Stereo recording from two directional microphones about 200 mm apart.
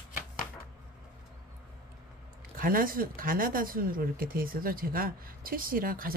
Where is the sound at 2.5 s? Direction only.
45° right (ahead or behind).